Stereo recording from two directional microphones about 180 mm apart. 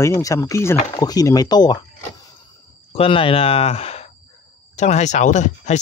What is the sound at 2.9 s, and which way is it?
Speech, 30° left (ahead or behind).